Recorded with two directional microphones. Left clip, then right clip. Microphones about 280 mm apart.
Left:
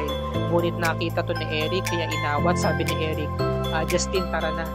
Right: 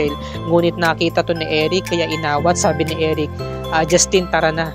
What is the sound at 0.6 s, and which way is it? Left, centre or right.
Speech, right.